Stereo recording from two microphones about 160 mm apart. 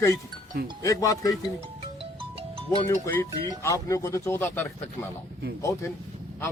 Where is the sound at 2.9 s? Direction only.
15° left (ahead or behind).